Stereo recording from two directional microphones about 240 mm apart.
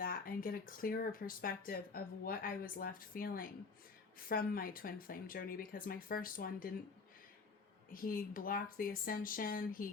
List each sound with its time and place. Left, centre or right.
0.0 s speech: left
7.9 s speech: left